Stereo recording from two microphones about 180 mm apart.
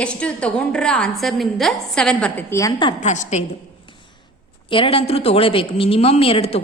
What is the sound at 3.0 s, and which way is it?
Speech, 40° left (ahead or behind).